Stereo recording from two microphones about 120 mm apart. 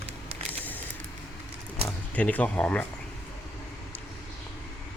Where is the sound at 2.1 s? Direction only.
10° left (ahead or behind).